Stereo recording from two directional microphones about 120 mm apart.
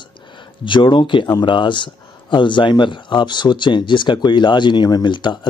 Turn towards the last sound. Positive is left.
turn(degrees=40)  # may be behind; listen again after turning